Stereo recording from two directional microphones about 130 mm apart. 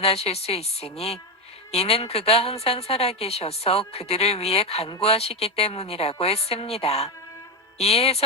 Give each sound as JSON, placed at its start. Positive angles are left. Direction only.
{"t": 0.0, "sound": "a woman's voice", "side_deg": 50}